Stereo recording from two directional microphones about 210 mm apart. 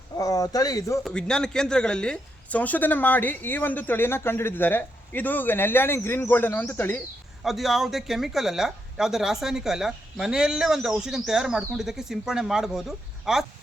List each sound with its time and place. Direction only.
0.2 s speech: 15° left (ahead or behind)
1.0 s a woman's voice: 5° left (ahead or behind)
7.4 s speech: centre (ahead or behind)